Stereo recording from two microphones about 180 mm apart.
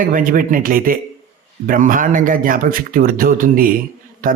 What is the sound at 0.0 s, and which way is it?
Speech, 50° right (ahead or behind).